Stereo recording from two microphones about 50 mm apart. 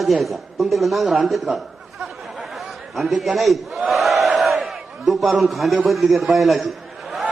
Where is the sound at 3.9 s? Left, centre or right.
Centre.